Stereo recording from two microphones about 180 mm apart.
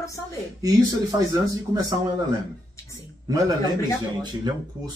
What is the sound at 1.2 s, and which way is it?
Speech, 20° right (ahead or behind).